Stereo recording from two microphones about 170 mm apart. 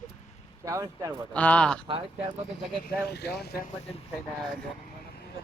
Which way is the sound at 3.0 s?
75° left (ahead or behind).